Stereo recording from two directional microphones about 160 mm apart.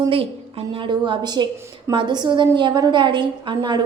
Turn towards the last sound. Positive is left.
turn(degrees=-30)  # may be behind; listen again after turning